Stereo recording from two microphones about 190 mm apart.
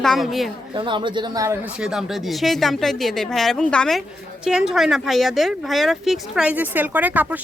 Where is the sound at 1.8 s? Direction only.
5° right (ahead or behind).